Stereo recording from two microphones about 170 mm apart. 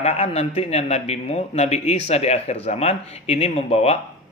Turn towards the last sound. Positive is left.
turn(degrees=40)  # may be behind; listen again after turning